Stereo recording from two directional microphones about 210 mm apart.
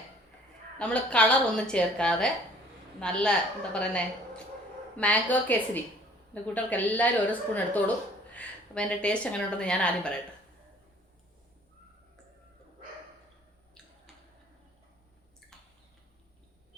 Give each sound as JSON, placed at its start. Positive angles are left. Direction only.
{"t": 0.8, "sound": "a woman's voice", "side_deg": 5}
{"t": 14.1, "sound": "tick-tock", "side_deg": 0}